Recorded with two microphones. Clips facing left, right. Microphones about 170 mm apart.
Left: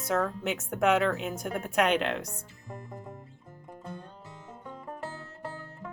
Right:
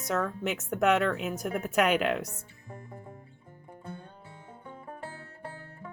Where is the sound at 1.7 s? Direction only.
5° right (ahead or behind).